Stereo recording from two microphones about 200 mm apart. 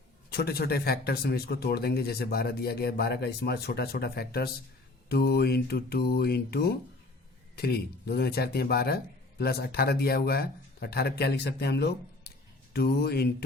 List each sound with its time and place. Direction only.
0.3 s speech: 50° left (ahead or behind)